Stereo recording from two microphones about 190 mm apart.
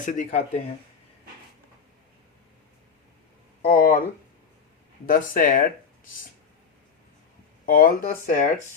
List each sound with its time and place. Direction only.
0.0 s speech: 45° left (ahead or behind)
3.6 s speech: 45° left (ahead or behind)
5.0 s speech: 45° left (ahead or behind)
7.6 s speech: 45° left (ahead or behind)